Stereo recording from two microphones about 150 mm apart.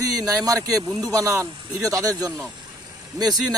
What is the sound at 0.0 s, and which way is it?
A man's voice, 25° right (ahead or behind).